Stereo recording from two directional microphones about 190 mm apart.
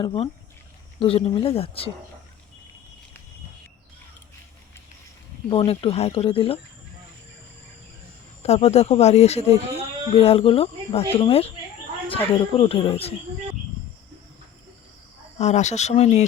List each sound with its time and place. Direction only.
0.0 s speech: 25° left (ahead or behind)
5.5 s speech: 30° left (ahead or behind)
8.4 s speech: 35° left (ahead or behind)
15.4 s speech: 35° left (ahead or behind)